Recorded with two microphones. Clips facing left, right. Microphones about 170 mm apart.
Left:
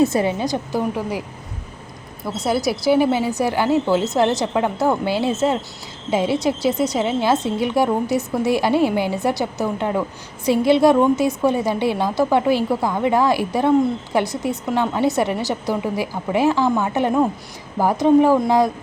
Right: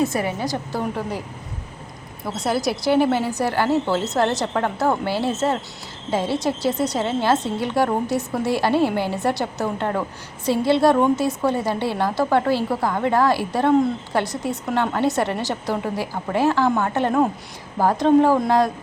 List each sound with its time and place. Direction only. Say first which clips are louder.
0.0 s a woman's voice: left 4 dB; 25° left (ahead or behind)
2.6 s a woman's voice: left 2 dB; 10° left (ahead or behind)